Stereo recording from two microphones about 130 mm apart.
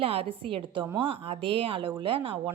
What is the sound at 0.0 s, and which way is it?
A woman's voice, 45° right (ahead or behind).